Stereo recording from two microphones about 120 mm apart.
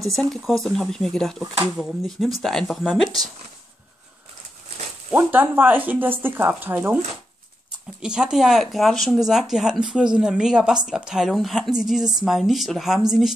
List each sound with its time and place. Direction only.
0.0 s speech: centre (ahead or behind)
5.1 s speech: 15° right (ahead or behind)
8.0 s speech: 5° right (ahead or behind)